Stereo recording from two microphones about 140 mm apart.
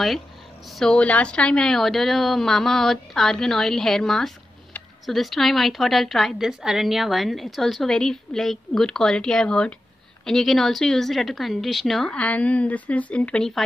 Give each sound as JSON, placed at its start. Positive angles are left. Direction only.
{"t": 0.7, "sound": "a woman's voice", "side_deg": 5}